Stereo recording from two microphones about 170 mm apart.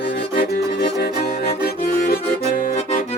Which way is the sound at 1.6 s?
55° left (ahead or behind).